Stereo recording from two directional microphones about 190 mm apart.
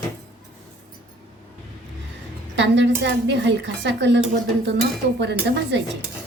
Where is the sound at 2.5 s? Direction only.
70° right (ahead or behind).